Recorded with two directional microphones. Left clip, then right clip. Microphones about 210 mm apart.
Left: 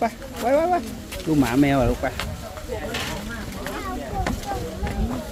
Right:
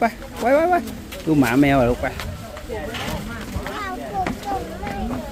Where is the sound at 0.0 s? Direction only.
25° right (ahead or behind).